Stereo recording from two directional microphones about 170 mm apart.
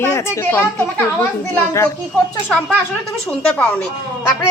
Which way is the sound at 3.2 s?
5° left (ahead or behind).